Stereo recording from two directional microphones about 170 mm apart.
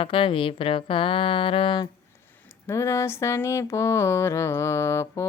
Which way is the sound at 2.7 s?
15° left (ahead or behind).